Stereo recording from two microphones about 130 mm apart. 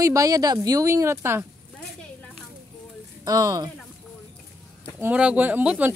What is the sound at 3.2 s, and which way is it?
Speech, 30° right (ahead or behind).